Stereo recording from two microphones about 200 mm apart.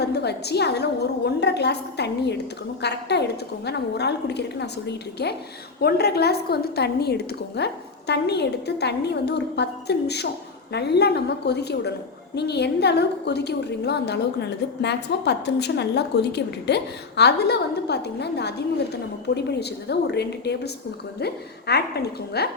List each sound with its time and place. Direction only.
0.0 s a woman's voice: 55° left (ahead or behind)